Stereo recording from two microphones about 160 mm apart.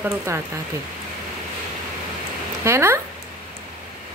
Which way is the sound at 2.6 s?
15° right (ahead or behind).